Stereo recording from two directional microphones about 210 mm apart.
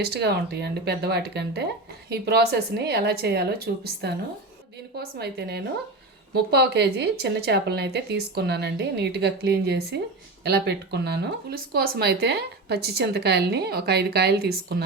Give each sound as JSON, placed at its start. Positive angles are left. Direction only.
{"t": 0.0, "sound": "speech", "side_deg": -50}